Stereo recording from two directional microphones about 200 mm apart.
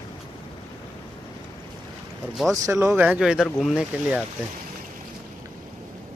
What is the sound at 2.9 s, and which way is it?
Speech, 5° right (ahead or behind).